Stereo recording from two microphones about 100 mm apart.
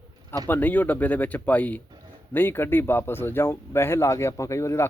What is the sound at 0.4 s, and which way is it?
Speech, 20° left (ahead or behind).